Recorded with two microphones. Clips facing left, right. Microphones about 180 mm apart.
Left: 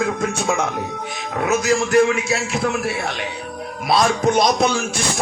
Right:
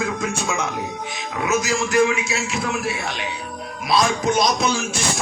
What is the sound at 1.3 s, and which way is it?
A man's voice, 55° left (ahead or behind).